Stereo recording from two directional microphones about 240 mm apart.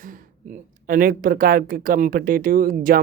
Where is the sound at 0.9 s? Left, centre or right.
Right.